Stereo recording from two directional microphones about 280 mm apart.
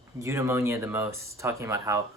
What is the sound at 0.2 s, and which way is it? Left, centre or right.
Speech, centre.